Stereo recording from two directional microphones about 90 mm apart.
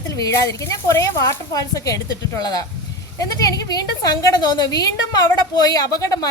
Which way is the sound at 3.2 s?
45° left (ahead or behind).